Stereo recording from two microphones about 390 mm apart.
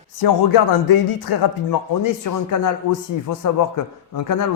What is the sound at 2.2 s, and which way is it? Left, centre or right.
A man's voice, left.